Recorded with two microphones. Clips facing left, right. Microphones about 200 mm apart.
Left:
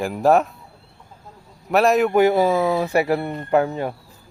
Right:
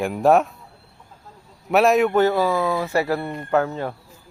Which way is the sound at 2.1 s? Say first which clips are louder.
Left 2 dB; 15° left (ahead or behind).